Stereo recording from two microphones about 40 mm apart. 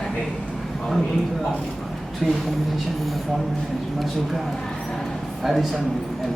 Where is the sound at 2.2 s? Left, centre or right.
Centre.